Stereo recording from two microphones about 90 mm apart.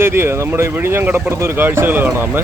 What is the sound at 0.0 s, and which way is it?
Speech, 25° right (ahead or behind).